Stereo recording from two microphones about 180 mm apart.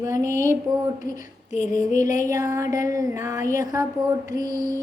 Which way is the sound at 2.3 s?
20° right (ahead or behind).